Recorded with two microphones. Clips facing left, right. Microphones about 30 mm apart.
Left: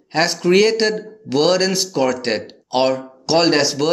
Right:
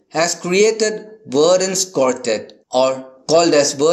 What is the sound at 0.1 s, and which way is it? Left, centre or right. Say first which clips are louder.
Speech: left 2 dB; left.